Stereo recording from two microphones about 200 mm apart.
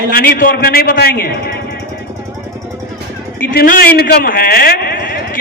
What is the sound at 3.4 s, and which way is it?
A man's voice, 45° left (ahead or behind).